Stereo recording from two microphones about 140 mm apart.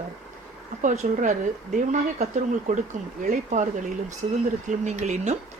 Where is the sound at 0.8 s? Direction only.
65° right (ahead or behind).